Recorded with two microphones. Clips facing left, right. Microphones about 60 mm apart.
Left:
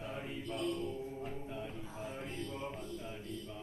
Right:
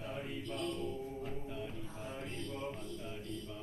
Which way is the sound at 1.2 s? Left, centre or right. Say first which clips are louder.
Even; left.